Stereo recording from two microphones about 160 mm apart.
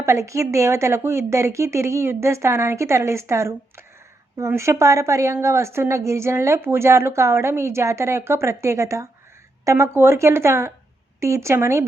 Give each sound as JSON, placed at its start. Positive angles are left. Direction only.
{"t": 0.0, "sound": "a woman's voice", "side_deg": -20}